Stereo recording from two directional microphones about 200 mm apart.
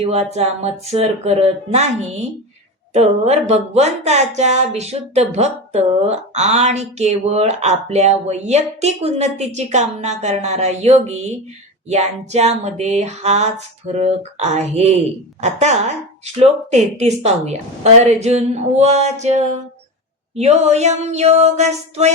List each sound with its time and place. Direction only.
0.0 s speech: 30° right (ahead or behind)